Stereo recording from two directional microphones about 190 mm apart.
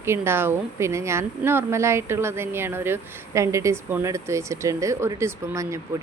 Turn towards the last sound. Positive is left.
turn(degrees=-15)  # may be behind; listen again after turning